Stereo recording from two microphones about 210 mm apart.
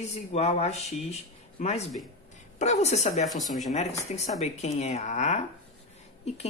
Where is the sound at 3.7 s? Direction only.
30° left (ahead or behind).